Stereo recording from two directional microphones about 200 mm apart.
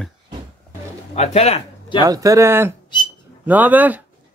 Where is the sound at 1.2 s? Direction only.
30° left (ahead or behind).